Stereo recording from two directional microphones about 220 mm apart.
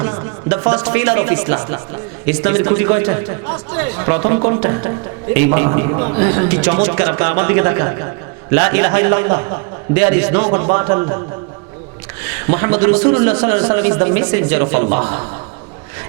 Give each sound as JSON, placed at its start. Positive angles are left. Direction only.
{"t": 0.0, "sound": "music", "side_deg": -20}
{"t": 0.8, "sound": "a man's voice", "side_deg": -10}
{"t": 4.1, "sound": "a man's voice", "side_deg": -30}
{"t": 12.2, "sound": "a sound", "side_deg": -10}
{"t": 12.9, "sound": "a man's voice", "side_deg": -30}
{"t": 13.1, "sound": "a man's voice", "side_deg": -20}
{"t": 14.8, "sound": "a man's voice", "side_deg": -30}